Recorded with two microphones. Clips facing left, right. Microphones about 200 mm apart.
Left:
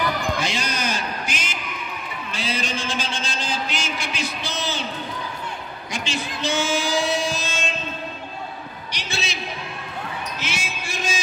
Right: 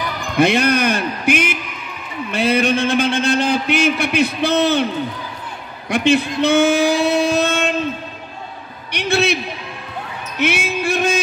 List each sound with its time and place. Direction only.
0.4 s a man's voice: 60° right (ahead or behind)
5.9 s a man's voice: 60° right (ahead or behind)
6.4 s singing: 60° right (ahead or behind)
8.9 s a man's voice: 60° right (ahead or behind)
10.4 s a man's voice: 60° right (ahead or behind)